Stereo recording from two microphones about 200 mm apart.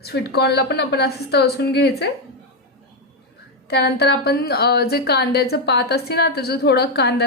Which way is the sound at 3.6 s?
55° left (ahead or behind).